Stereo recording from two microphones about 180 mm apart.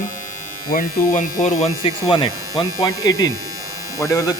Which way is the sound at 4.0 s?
20° left (ahead or behind).